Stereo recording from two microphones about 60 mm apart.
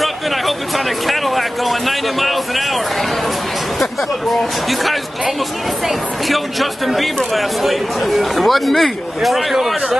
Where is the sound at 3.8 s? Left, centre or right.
Centre.